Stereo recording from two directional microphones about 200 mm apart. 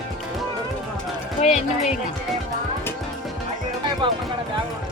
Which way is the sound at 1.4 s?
35° left (ahead or behind).